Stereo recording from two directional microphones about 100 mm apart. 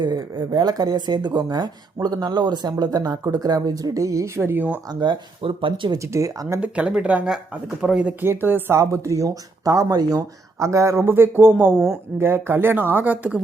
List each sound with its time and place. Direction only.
0.0 s speech: 45° right (ahead or behind); by 4.8 s 20° right (ahead or behind)
4.9 s speech: 45° right (ahead or behind)
6.0 s speech: 30° right (ahead or behind)
6.6 s speech: 10° right (ahead or behind)
8.2 s speech: 20° right (ahead or behind)